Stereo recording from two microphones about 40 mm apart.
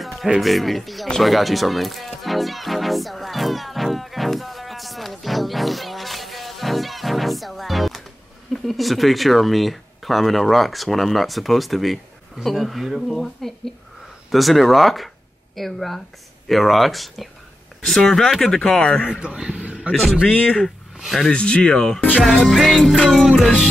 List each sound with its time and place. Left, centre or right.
0.0 s speech: centre
1.2 s music: centre
8.5 s speech: centre
18.8 s speech: left
19.0 s a man's voice: centre
19.9 s a man's voice: right
21.3 s speech: left
21.7 s speech: centre
22.5 s speech: centre